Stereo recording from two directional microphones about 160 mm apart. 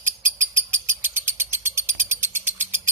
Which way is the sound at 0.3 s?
15° right (ahead or behind).